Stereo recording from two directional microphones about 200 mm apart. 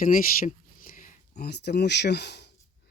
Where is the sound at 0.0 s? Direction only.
45° left (ahead or behind).